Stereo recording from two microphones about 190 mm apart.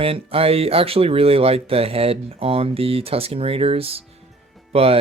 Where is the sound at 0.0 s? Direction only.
30° right (ahead or behind).